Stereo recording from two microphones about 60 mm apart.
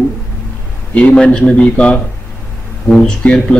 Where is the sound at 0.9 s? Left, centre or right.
Centre.